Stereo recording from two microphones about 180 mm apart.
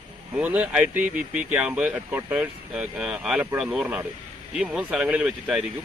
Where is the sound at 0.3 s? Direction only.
10° right (ahead or behind).